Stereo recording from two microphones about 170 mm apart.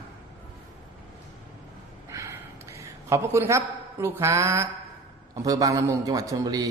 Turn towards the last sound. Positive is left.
turn(degrees=-20)  # may be behind; listen again after turning